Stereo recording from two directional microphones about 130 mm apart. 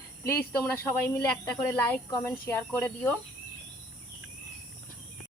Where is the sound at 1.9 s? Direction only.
15° left (ahead or behind).